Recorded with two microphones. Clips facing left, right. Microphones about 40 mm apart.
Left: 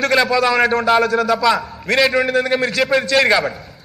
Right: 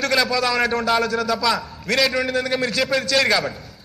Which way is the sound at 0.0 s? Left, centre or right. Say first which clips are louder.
Left 5 dB; centre.